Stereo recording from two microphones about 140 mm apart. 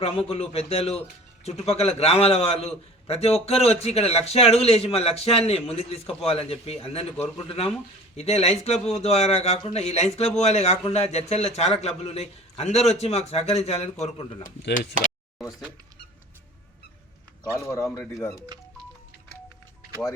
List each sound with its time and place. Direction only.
0.0 s a man's voice: 45° left (ahead or behind)
17.7 s speech: 20° left (ahead or behind)